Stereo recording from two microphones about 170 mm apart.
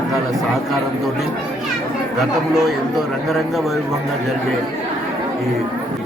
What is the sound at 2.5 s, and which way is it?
Speech, centre (ahead or behind).